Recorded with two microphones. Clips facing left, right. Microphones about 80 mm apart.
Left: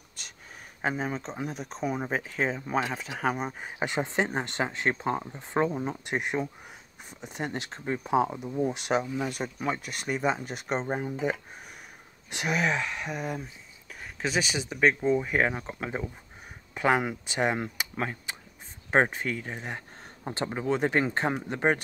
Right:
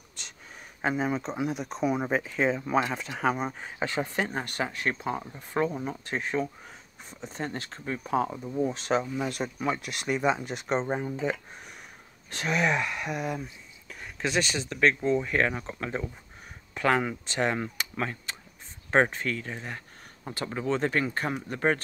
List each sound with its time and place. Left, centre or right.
0.8 s speech: centre
9.0 s speech: centre
12.5 s speech: centre
20.9 s speech: left